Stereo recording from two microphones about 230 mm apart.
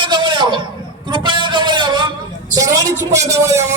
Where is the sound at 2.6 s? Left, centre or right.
Centre.